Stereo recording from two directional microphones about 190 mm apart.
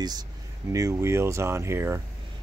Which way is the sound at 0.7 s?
15° right (ahead or behind).